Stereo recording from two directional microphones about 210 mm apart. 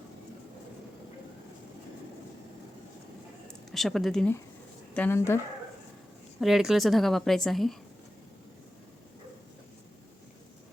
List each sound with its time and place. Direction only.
3.7 s a woman's voice: centre (ahead or behind)
6.4 s a woman's voice: centre (ahead or behind)